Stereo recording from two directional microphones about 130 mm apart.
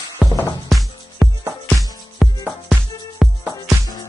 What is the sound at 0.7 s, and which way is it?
Music, centre (ahead or behind).